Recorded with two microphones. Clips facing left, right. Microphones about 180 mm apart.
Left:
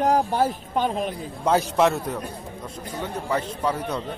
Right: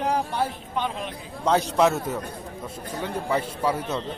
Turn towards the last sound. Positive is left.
turn(degrees=-10)  # may be behind; listen again after turning